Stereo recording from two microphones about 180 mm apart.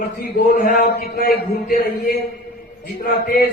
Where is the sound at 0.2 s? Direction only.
55° left (ahead or behind).